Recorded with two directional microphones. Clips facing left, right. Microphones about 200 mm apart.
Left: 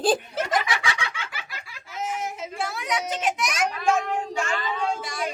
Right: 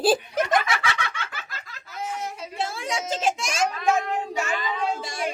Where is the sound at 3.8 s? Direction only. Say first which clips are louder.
Left 2 dB; 5° right (ahead or behind).